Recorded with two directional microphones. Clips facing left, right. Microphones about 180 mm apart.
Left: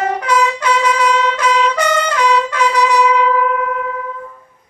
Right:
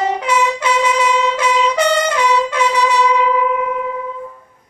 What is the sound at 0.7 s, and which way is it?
Vehicle horn, 25° right (ahead or behind).